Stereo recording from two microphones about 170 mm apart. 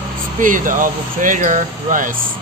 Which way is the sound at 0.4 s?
50° right (ahead or behind).